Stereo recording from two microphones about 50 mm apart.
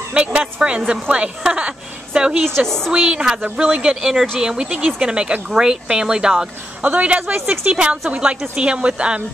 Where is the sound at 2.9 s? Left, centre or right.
Centre.